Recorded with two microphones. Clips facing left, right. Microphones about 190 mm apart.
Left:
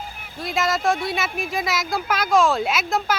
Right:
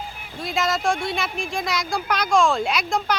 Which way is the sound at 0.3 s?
Centre (ahead or behind).